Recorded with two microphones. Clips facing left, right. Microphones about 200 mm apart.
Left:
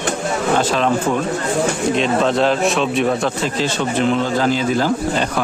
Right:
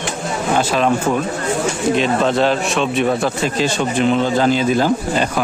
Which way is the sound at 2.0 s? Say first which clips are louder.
Even; centre (ahead or behind).